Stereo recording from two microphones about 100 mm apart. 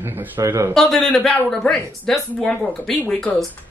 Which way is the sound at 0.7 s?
5° left (ahead or behind).